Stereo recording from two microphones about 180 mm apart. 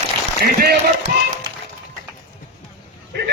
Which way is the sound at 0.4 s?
60° right (ahead or behind).